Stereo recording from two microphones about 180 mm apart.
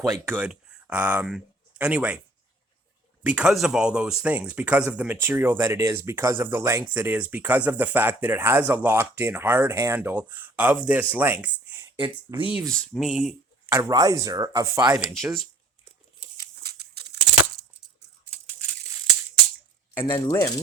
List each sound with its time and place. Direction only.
0.1 s speech: 10° right (ahead or behind)
3.2 s speech: 5° right (ahead or behind)
11.9 s speech: 30° right (ahead or behind)
12.5 s speech: centre (ahead or behind)
13.7 s speech: 20° right (ahead or behind)
16.7 s a sound: 65° right (ahead or behind)
19.9 s speech: 10° left (ahead or behind)